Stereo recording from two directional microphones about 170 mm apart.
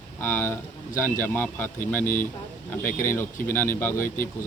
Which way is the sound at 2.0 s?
50° left (ahead or behind).